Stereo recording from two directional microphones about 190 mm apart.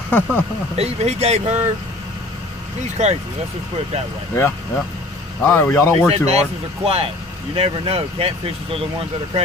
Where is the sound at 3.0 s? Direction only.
35° right (ahead or behind).